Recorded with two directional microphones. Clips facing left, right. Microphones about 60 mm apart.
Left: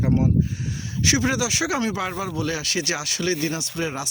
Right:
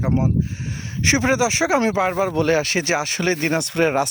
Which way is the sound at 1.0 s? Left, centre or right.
Right.